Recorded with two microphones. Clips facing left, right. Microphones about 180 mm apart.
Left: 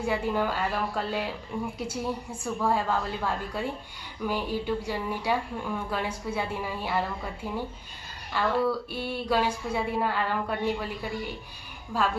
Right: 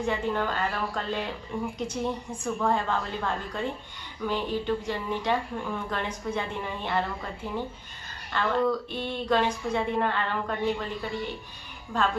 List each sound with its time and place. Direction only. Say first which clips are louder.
0.0 s speech: left 1 dB; 10° left (ahead or behind)
11.9 s speech: even; 10° left (ahead or behind)